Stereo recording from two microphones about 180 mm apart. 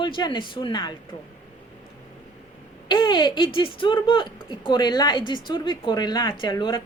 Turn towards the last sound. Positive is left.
turn(degrees=25)  # may be behind; listen again after turning